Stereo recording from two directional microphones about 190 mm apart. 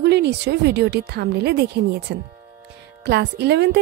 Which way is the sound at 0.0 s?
60° right (ahead or behind).